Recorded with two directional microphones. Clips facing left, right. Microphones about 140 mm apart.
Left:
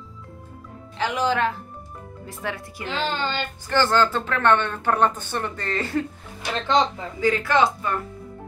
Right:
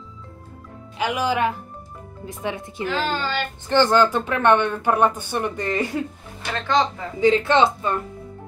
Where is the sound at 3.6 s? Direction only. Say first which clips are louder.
Right 3 dB; 20° right (ahead or behind).